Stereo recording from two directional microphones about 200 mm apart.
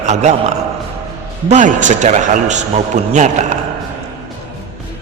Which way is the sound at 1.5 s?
40° right (ahead or behind).